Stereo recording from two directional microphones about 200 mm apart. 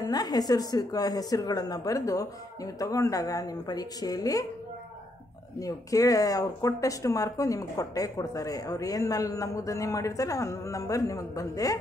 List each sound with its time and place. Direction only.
0.0 s a woman's voice: 20° left (ahead or behind)
5.6 s speech: 15° left (ahead or behind)